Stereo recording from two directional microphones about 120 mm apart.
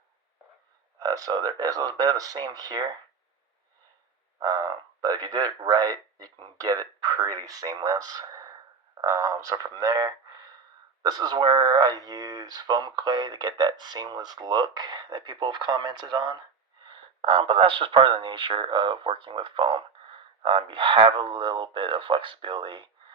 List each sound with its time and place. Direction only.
0.9 s speech: 30° right (ahead or behind)
4.4 s a sound: 35° right (ahead or behind)
4.9 s speech: 35° right (ahead or behind)